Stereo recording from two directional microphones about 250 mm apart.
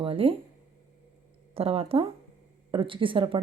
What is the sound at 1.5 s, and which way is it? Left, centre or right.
Speech, right.